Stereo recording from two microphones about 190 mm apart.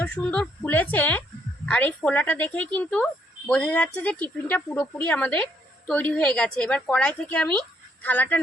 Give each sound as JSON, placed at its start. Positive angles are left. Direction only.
{"t": 0.0, "sound": "a woman's voice", "side_deg": 5}